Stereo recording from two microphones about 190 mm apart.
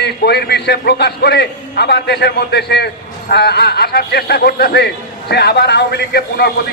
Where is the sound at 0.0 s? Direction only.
60° left (ahead or behind).